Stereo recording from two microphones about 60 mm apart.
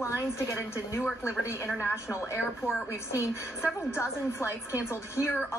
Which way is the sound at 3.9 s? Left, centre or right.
Left.